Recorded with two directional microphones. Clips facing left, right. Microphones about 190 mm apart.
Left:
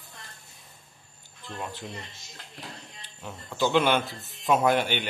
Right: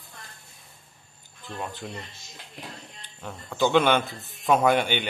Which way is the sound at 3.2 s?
5° left (ahead or behind).